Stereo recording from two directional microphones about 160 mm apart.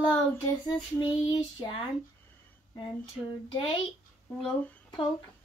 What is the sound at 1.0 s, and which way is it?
Child singing, 25° left (ahead or behind).